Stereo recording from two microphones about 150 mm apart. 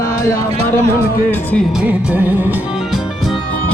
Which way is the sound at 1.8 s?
10° right (ahead or behind).